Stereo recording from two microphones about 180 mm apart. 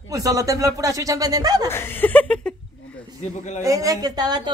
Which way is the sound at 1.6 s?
10° left (ahead or behind).